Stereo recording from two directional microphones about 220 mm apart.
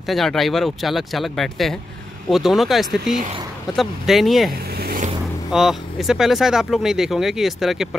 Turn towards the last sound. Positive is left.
turn(degrees=0)  # may be behind; listen again after turning